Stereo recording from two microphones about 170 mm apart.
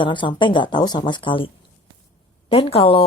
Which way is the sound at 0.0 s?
30° left (ahead or behind).